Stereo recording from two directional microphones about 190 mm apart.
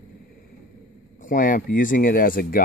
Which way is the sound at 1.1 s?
45° left (ahead or behind).